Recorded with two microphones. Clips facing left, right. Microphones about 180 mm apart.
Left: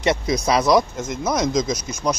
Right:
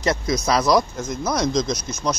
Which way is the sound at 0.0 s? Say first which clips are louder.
Left 2 dB; 5° left (ahead or behind).